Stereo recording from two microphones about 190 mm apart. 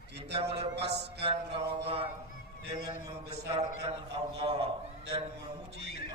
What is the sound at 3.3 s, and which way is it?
A man's voice, 30° right (ahead or behind).